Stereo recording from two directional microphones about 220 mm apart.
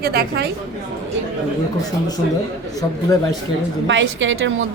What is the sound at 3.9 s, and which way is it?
Speech, 55° right (ahead or behind).